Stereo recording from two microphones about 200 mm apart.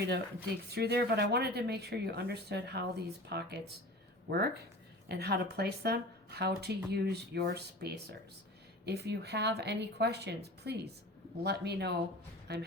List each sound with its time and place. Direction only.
0.4 s a woman's voice: 55° right (ahead or behind)